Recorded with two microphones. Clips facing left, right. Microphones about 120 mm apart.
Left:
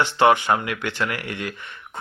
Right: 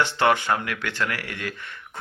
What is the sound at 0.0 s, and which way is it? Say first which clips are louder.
Speech: left 4 dB; 15° left (ahead or behind).